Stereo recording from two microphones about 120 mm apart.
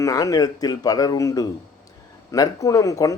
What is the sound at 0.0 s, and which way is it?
A man's voice, 30° left (ahead or behind).